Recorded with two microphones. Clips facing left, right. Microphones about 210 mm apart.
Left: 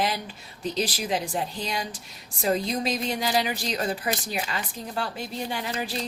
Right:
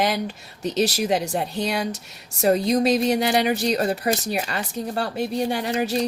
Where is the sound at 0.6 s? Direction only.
75° right (ahead or behind).